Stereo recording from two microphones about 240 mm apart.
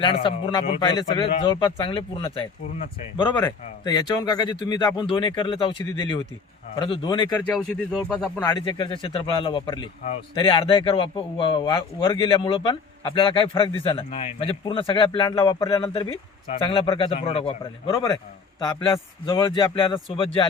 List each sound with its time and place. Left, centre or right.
0.0 s a man's voice: left
7.4 s speech: centre
8.4 s a man's voice: centre